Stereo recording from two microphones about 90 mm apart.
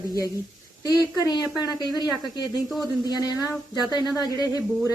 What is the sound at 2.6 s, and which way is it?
Speech, centre (ahead or behind).